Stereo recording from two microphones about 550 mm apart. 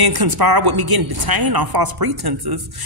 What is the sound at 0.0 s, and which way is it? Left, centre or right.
A woman's voice, right.